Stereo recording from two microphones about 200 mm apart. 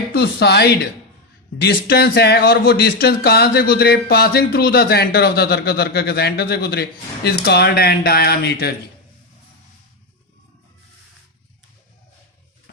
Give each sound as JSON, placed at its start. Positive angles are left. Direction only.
{"t": 0.1, "sound": "speech", "side_deg": 55}